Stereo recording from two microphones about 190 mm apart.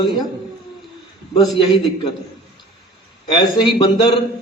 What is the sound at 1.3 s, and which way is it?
Speech, 25° left (ahead or behind).